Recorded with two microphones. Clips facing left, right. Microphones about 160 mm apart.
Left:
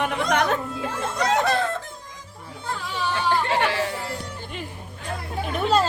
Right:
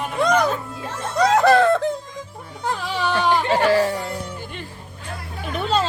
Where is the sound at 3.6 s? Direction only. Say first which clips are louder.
Right 7 dB; 40° right (ahead or behind).